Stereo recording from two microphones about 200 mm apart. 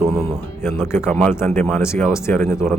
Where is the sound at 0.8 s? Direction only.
10° left (ahead or behind).